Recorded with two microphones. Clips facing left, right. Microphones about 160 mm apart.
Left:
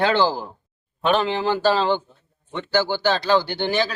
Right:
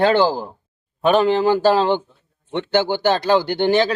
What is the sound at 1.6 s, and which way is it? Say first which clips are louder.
Speech: right 3 dB; 15° right (ahead or behind).